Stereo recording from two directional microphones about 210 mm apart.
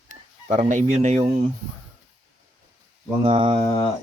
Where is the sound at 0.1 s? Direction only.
35° right (ahead or behind).